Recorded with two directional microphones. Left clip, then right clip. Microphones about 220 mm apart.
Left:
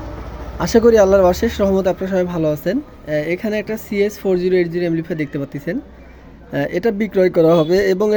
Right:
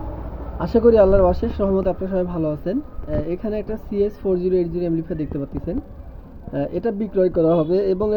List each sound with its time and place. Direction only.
0.8 s a woman's voice: 25° left (ahead or behind)